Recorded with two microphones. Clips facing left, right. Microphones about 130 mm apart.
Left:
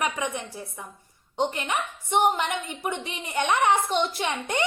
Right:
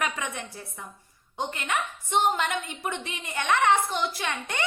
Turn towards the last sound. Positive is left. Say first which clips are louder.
# left 4 dB
turn(degrees=20)  # may be behind; listen again after turning